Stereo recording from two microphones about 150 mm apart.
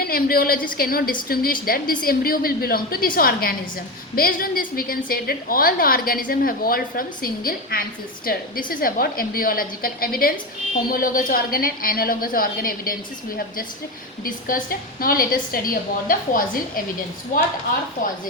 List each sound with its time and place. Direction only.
0.0 s a woman's voice: 80° left
14.3 s a woman's voice: 70° left (ahead or behind)